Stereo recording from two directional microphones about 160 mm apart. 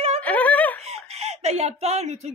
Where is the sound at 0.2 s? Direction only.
10° left (ahead or behind).